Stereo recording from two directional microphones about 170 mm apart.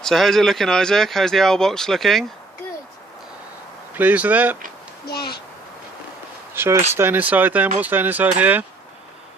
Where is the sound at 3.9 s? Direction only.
10° right (ahead or behind).